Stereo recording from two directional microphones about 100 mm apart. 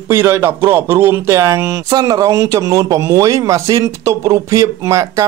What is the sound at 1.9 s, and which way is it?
Speech, 40° right (ahead or behind).